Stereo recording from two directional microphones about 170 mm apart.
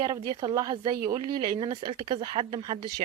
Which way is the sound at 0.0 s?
25° right (ahead or behind).